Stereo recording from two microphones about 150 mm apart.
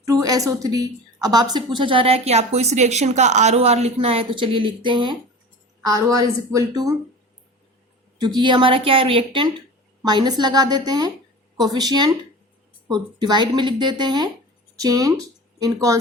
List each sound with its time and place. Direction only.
0.0 s a woman's voice: 25° right (ahead or behind)
8.2 s a woman's voice: 30° right (ahead or behind)